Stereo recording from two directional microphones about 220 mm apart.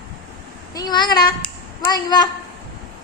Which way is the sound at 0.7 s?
20° left (ahead or behind).